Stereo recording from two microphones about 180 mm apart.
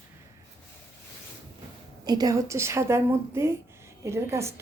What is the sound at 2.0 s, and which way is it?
A woman's voice, 20° right (ahead or behind).